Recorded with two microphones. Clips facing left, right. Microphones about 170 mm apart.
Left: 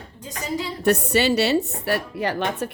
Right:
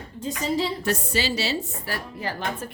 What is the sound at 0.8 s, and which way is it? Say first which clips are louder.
A woman's voice: left 7 dB; 65° left (ahead or behind).